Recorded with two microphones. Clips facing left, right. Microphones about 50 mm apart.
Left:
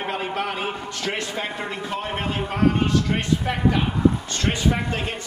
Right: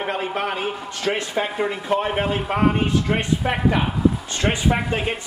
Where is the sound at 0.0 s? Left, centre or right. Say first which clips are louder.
Right 2 dB; centre.